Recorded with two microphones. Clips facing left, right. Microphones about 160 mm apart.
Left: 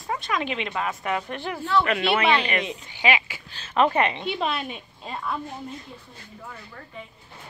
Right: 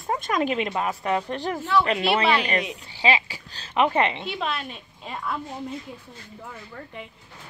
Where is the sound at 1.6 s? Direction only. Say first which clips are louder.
Even; 15° right (ahead or behind).